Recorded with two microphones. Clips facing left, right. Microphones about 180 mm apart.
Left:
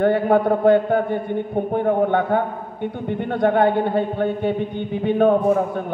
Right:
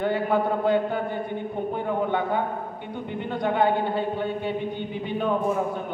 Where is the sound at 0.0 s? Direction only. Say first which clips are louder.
Left 7 dB; 60° left (ahead or behind).